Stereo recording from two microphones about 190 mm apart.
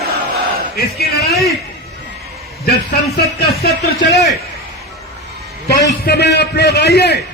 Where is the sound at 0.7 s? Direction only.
55° left (ahead or behind).